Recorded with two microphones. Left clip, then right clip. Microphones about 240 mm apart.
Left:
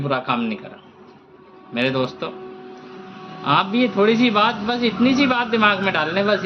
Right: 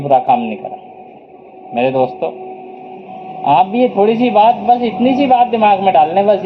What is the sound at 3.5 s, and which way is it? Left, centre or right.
A man's voice, centre.